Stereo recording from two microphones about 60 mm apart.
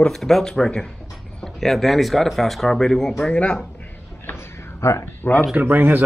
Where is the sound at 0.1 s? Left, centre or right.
Centre.